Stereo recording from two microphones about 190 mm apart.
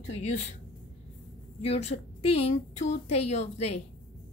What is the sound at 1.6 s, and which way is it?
A woman's voice, 35° left (ahead or behind).